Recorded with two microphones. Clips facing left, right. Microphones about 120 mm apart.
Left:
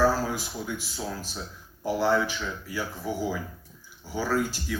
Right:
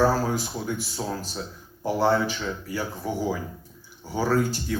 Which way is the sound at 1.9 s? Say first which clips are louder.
Right 2 dB; 35° right (ahead or behind).